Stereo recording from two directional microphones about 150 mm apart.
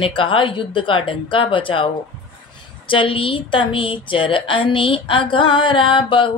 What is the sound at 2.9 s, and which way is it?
A woman's voice, 35° left (ahead or behind).